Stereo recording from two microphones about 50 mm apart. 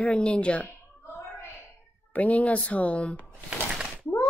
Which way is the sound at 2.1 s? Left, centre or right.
Left.